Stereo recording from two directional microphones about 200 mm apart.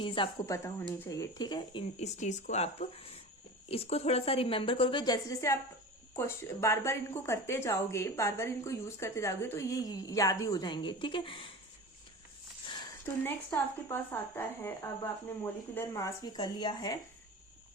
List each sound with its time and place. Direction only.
0.0 s a woman's voice: 25° left (ahead or behind)
2.1 s a woman's voice: 35° left (ahead or behind)
12.6 s a sound: 20° left (ahead or behind)
13.2 s a woman's voice: 10° left (ahead or behind)